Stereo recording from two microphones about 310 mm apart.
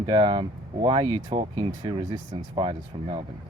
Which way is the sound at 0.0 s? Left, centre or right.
Centre.